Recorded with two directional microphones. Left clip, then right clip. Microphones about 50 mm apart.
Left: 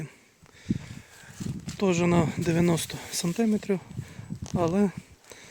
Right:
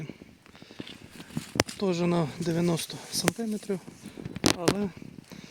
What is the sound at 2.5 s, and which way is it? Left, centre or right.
Speech, left.